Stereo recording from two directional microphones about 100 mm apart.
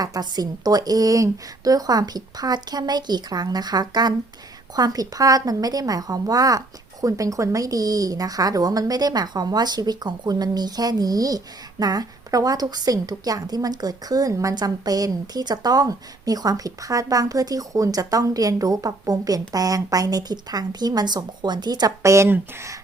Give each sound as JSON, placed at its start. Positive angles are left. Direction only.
{"t": 0.0, "sound": "a woman's voice", "side_deg": -40}